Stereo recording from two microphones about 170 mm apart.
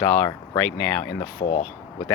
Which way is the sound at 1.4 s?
50° left (ahead or behind).